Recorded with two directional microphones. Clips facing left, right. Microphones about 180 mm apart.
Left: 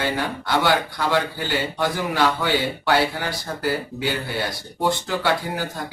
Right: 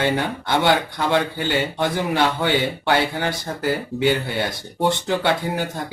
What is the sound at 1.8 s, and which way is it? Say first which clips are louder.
Speech: even; 25° right (ahead or behind).